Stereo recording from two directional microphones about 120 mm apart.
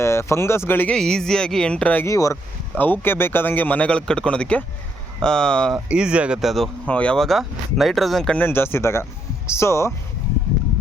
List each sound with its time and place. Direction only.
0.0 s speech: 20° left (ahead or behind)
0.9 s speech: 5° left (ahead or behind)
2.0 s speech: 25° left (ahead or behind)
2.7 s speech: 15° left (ahead or behind)
5.9 s speech: 10° right (ahead or behind)
6.8 s speech: 10° left (ahead or behind)
8.4 s speech: 20° left (ahead or behind)